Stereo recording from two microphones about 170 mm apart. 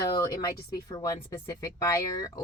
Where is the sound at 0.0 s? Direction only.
25° left (ahead or behind).